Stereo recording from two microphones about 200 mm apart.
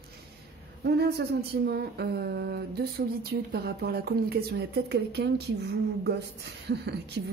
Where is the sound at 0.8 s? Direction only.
55° right (ahead or behind).